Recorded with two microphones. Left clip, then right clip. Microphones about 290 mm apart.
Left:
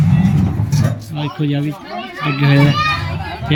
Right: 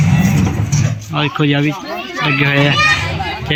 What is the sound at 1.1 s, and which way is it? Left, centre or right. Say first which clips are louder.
Speech: right 8 dB; centre.